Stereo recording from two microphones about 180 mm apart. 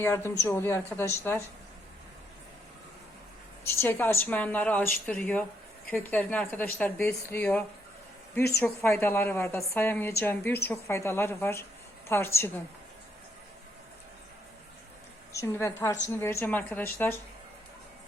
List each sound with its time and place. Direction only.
0.0 s speech: 15° left (ahead or behind)
3.7 s speech: 15° left (ahead or behind)
15.3 s speech: 15° left (ahead or behind)